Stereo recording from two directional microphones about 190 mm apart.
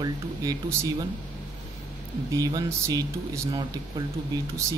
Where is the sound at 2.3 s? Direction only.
20° right (ahead or behind).